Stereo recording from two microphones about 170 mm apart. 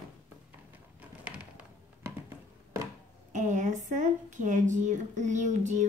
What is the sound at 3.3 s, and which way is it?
Speech, 45° right (ahead or behind).